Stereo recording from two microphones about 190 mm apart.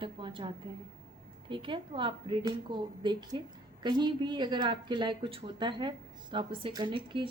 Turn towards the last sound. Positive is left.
turn(degrees=-25)  # may be behind; listen again after turning